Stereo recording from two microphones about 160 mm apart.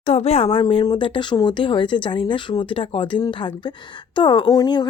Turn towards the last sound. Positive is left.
turn(degrees=25)  # may be behind; listen again after turning